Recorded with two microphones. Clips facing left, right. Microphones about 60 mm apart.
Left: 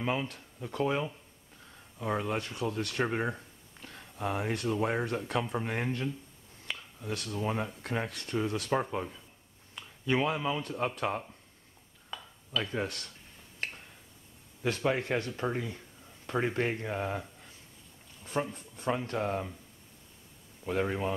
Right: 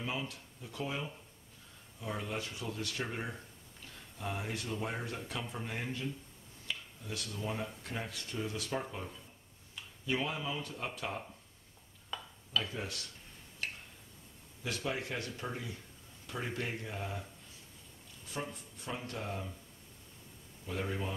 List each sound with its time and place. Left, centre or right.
0.0 s speech: left
10.0 s speech: left
12.7 s speech: left
13.6 s a sound: left
14.6 s speech: left
18.2 s a sound: left
18.9 s speech: left
20.6 s speech: left